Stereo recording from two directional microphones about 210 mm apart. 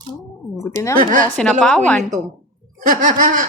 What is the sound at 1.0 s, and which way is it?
Snicker, 40° right (ahead or behind).